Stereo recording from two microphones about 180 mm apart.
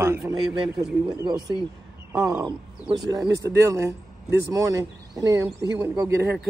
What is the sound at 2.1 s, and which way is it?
Speech, 5° right (ahead or behind).